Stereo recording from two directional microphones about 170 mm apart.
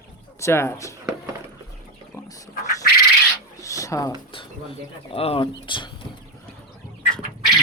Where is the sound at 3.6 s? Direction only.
20° left (ahead or behind).